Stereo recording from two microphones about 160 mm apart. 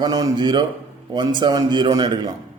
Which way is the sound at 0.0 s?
25° right (ahead or behind).